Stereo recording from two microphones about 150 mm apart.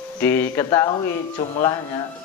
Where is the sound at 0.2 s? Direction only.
15° left (ahead or behind).